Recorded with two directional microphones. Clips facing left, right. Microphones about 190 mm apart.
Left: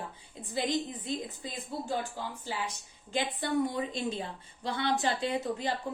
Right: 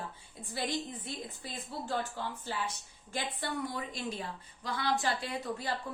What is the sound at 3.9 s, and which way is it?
A woman's voice, 25° left (ahead or behind).